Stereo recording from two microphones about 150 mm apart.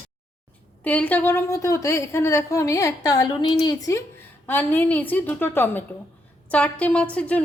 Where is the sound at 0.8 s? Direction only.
10° left (ahead or behind); by 3.5 s 30° left (ahead or behind).